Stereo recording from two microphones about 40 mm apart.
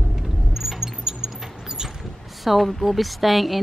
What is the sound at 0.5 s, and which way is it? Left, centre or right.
Keys jangling, centre.